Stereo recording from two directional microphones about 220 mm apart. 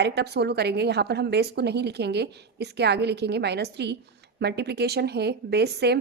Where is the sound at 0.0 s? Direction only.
50° right (ahead or behind).